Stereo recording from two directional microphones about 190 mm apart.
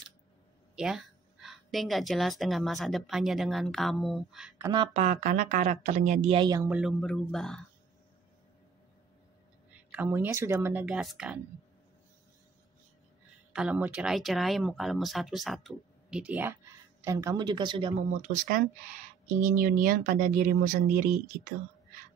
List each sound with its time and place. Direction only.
0.7 s speech: centre (ahead or behind)
4.6 s speech: 20° right (ahead or behind)
4.9 s a woman's voice: 40° right (ahead or behind); by 6.7 s 20° right (ahead or behind)
6.7 s speech: 5° right (ahead or behind)
9.7 s speech: 10° right (ahead or behind)
13.5 s speech: 5° right (ahead or behind); by 17.9 s 25° right (ahead or behind)
18.2 s speech: 45° right (ahead or behind)